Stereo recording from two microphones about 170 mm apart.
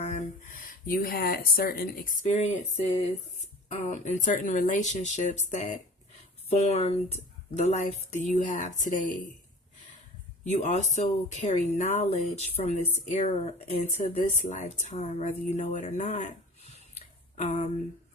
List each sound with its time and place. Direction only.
0.0 s speech: 45° left (ahead or behind)
10.4 s speech: 45° left (ahead or behind)
17.3 s a sound: 40° left (ahead or behind)